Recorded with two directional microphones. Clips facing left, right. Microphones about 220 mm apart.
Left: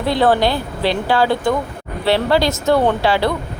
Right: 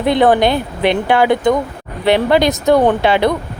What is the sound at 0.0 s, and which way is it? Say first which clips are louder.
Speech: right 3 dB; 20° right (ahead or behind).